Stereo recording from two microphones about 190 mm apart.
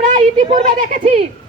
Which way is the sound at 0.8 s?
45° right (ahead or behind).